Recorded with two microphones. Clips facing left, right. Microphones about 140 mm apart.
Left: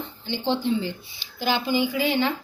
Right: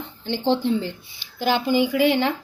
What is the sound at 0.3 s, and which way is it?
Speech, 70° right (ahead or behind).